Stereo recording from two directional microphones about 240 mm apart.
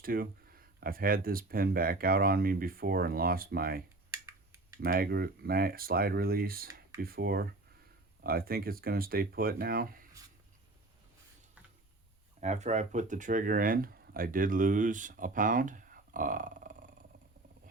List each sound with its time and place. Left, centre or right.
0.0 s speech: right
12.4 s speech: right